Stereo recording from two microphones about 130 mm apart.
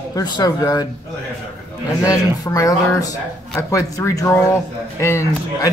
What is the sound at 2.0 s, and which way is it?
Speech, 25° left (ahead or behind).